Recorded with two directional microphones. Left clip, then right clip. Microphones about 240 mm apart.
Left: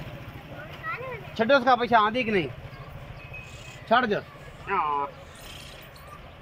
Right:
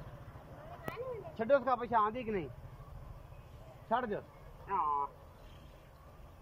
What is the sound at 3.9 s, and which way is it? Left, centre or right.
Speech, left.